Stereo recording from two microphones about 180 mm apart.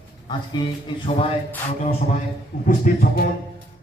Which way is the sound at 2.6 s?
50° left (ahead or behind).